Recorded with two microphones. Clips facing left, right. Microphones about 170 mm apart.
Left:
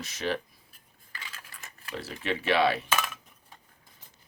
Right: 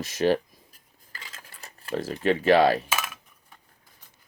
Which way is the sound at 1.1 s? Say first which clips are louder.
Even; 35° right (ahead or behind).